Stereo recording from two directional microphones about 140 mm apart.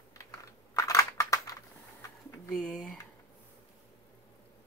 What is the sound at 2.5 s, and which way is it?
Speech, 5° left (ahead or behind).